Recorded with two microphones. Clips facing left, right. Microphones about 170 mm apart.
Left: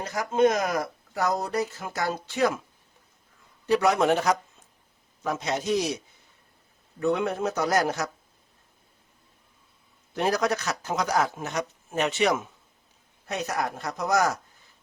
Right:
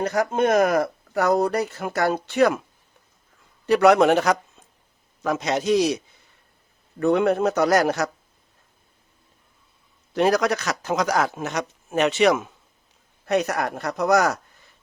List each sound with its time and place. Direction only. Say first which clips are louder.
0.0 s speech: right 1 dB; 60° right (ahead or behind)
3.7 s speech: right 6 dB; 70° right (ahead or behind)
5.2 s speech: right 5 dB; 90° right
7.0 s speech: right 6 dB; 60° right (ahead or behind)
10.2 s speech: right 5 dB; 90° right
13.2 s speech: right 7 dB; 65° right (ahead or behind)